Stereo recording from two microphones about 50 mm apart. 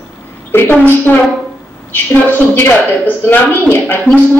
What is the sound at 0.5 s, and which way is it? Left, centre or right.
Speech, left.